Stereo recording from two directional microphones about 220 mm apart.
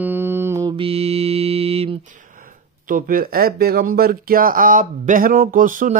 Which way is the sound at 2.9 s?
40° right (ahead or behind).